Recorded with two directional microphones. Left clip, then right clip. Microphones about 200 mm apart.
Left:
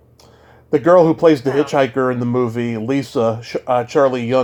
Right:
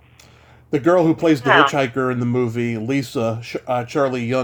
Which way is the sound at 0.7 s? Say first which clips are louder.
Left 5 dB; 10° right (ahead or behind).